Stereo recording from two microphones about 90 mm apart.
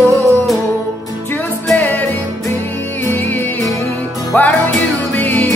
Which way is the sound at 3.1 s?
25° left (ahead or behind).